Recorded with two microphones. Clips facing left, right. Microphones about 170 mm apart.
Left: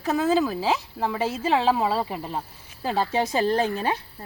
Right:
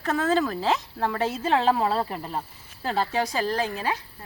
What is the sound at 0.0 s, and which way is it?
Speech, 10° left (ahead or behind).